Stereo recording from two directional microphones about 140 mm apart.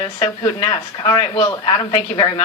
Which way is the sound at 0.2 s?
30° left (ahead or behind).